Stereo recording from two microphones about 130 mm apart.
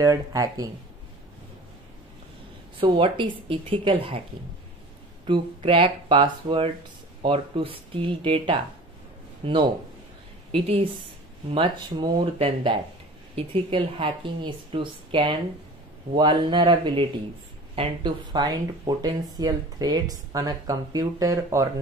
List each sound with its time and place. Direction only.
0.0 s speech: 25° right (ahead or behind)
2.8 s a woman's voice: 40° right (ahead or behind)
5.2 s a woman's voice: 40° right (ahead or behind)
12.4 s speech: 40° right (ahead or behind); by 21.6 s 25° right (ahead or behind)